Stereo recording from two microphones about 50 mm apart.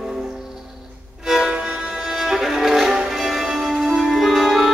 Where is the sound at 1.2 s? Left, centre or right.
Centre.